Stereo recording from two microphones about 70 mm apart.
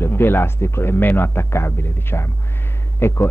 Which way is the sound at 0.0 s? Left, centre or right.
Left.